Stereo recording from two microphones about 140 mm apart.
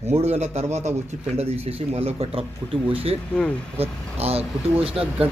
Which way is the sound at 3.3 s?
10° left (ahead or behind).